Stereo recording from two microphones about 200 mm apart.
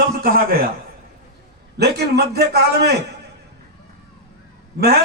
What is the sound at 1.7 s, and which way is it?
A man's voice, 55° right (ahead or behind).